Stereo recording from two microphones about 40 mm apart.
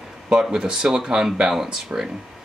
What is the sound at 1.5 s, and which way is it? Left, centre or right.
Speech, centre.